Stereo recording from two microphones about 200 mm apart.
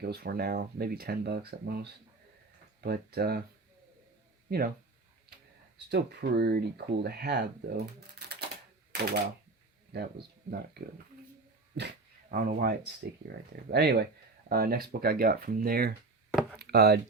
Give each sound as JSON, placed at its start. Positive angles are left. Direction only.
{"t": 0.0, "sound": "speech", "side_deg": -50}
{"t": 4.4, "sound": "speech", "side_deg": -50}
{"t": 5.9, "sound": "speech", "side_deg": -55}
{"t": 9.9, "sound": "speech", "side_deg": -50}
{"t": 11.7, "sound": "speech", "side_deg": -60}
{"t": 12.3, "sound": "speech", "side_deg": -45}
{"t": 16.6, "sound": "a sound", "side_deg": -55}